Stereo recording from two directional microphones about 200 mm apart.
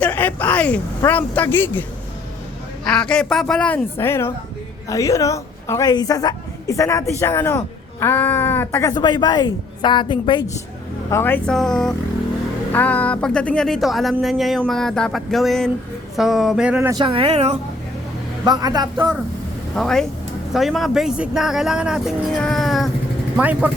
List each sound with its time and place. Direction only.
0.0 s speech: 10° left (ahead or behind)
2.8 s a woman's voice: 5° left (ahead or behind); by 10.4 s 25° left (ahead or behind)
11.1 s speech: 10° left (ahead or behind); by 16.9 s 5° right (ahead or behind)
16.9 s speech: 25° right (ahead or behind)
18.4 s speech: 20° right (ahead or behind)
19.7 s speech: centre (ahead or behind)